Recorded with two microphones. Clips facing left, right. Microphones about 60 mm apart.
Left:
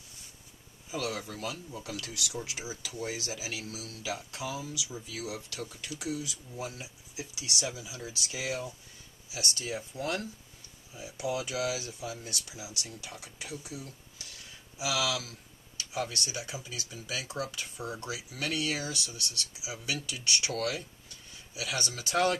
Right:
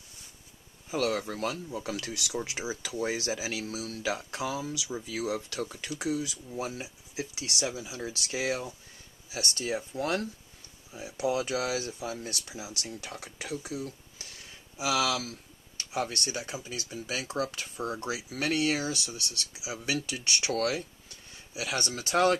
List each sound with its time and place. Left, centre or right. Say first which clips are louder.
0.8 s speech: right 6 dB; right
1.8 s speech: right 4 dB; right
21.5 s speech: right 3 dB; right